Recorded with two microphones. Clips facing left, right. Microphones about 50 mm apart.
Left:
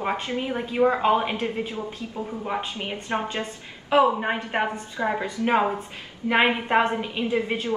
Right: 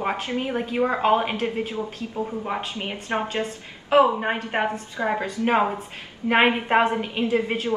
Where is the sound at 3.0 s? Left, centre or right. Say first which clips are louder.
Right 2 dB; right.